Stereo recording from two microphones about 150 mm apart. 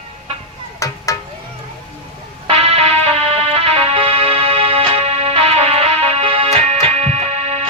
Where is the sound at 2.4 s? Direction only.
40° right (ahead or behind).